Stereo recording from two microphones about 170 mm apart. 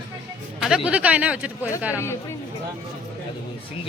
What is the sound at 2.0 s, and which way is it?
Speech, 15° left (ahead or behind).